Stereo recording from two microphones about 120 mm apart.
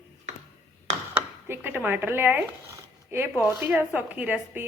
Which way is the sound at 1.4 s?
15° right (ahead or behind).